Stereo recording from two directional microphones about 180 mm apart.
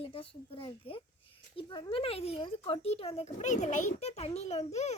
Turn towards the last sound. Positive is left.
turn(degrees=40)  # may be behind; listen again after turning